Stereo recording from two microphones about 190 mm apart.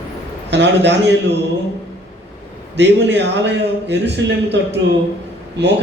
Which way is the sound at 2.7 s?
65° right (ahead or behind).